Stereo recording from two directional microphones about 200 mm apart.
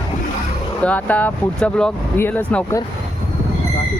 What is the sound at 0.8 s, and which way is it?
Speech, 5° left (ahead or behind).